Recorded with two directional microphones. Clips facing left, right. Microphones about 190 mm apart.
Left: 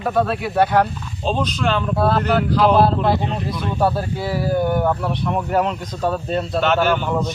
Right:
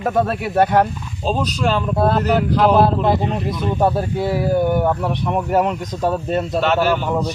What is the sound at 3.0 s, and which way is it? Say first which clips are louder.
Speech: right 2 dB; 20° right (ahead or behind).